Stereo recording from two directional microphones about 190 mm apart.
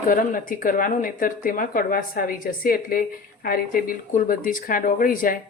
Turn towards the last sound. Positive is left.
turn(degrees=45)  # may be behind; listen again after turning